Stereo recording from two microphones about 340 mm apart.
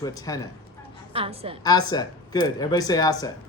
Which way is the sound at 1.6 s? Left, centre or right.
Centre.